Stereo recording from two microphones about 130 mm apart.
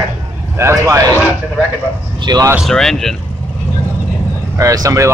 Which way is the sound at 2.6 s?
5° left (ahead or behind).